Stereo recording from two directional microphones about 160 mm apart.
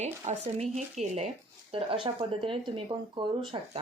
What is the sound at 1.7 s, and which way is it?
A woman's voice, 35° right (ahead or behind).